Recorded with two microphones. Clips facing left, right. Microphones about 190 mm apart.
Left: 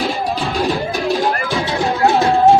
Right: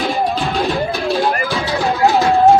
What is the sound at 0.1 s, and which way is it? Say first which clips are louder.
Music: right 2 dB; centre (ahead or behind).